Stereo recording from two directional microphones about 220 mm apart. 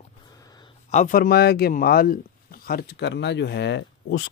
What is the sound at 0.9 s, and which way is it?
Speech, 35° left (ahead or behind).